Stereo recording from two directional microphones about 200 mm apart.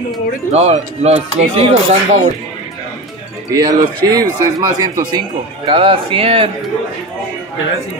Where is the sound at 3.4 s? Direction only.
20° right (ahead or behind).